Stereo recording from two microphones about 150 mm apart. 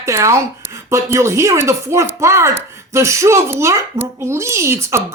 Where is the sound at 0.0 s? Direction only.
20° right (ahead or behind).